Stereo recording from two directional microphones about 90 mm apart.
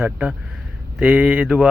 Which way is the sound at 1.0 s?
10° right (ahead or behind).